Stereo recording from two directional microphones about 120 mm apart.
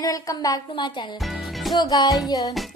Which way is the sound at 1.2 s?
Centre (ahead or behind).